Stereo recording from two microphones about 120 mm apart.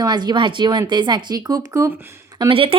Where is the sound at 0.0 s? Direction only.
35° right (ahead or behind).